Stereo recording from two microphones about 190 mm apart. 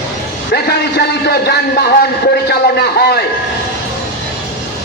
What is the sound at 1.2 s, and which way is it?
A man's voice, 55° left (ahead or behind).